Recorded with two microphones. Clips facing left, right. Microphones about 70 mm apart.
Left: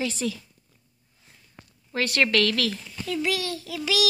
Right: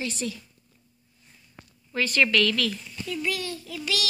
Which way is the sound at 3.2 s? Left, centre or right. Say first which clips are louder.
Left 3 dB; left.